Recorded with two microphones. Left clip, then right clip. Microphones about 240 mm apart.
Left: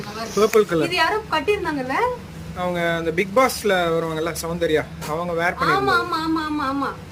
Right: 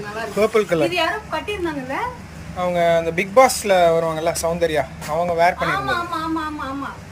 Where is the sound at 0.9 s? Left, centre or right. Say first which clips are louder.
Left 1 dB; left.